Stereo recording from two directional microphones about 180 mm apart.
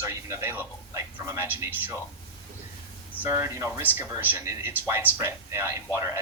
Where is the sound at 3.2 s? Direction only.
15° right (ahead or behind).